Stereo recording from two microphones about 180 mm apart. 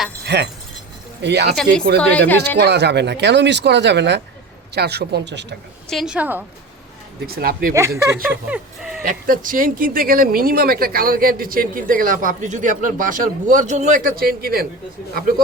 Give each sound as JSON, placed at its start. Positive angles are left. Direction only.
{"t": 0.3, "sound": "speech", "side_deg": -70}
{"t": 2.0, "sound": "speech", "side_deg": 10}
{"t": 2.6, "sound": "speech", "side_deg": -70}
{"t": 5.9, "sound": "a woman's voice", "side_deg": 0}
{"t": 7.3, "sound": "speech", "side_deg": -55}
{"t": 7.9, "sound": "speech", "side_deg": -15}
{"t": 9.0, "sound": "speech", "side_deg": -50}